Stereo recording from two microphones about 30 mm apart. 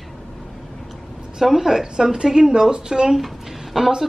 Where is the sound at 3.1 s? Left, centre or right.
Centre.